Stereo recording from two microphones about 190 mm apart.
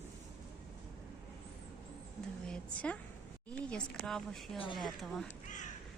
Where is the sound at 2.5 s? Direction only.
5° left (ahead or behind).